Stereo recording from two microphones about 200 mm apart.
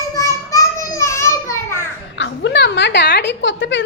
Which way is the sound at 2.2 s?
65° left (ahead or behind).